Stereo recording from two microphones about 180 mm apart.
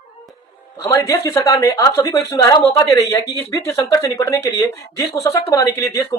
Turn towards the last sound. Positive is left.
turn(degrees=15)  # may be behind; listen again after turning